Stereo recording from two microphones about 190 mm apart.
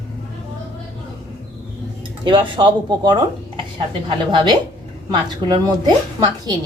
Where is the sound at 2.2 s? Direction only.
25° right (ahead or behind).